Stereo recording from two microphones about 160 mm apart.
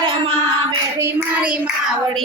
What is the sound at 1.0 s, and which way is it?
Child singing, 10° right (ahead or behind).